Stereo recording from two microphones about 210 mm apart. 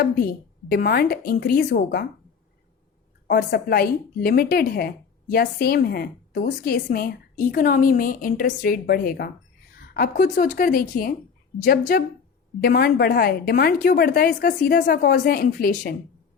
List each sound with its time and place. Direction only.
0.7 s a woman's voice: 45° left (ahead or behind)
3.2 s a woman's voice: 50° left (ahead or behind)